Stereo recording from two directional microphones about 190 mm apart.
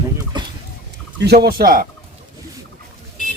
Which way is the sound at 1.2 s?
60° right (ahead or behind).